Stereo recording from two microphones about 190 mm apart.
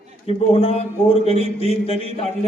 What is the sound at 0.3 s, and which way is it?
A man's voice, 30° left (ahead or behind).